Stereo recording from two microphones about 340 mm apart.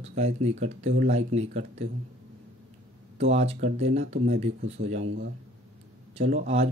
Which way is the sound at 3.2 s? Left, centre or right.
Centre.